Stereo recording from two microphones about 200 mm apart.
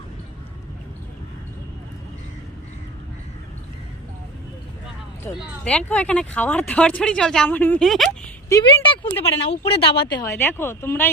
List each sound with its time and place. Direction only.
5.6 s speech: 5° left (ahead or behind)
8.4 s speech: 20° left (ahead or behind)
10.2 s speech: 10° left (ahead or behind)